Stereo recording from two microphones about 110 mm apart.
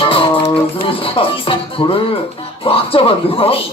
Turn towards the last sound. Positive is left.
turn(degrees=55)  # may be behind; listen again after turning